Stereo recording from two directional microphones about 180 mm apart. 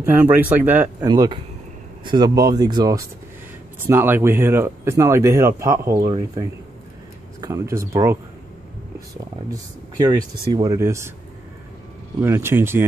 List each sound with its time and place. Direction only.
0.0 s speech: 10° right (ahead or behind)
1.0 s speech: 20° right (ahead or behind)
7.3 s speech: 20° right (ahead or behind)
9.5 s speech: 25° right (ahead or behind)
12.2 s speech: 15° right (ahead or behind)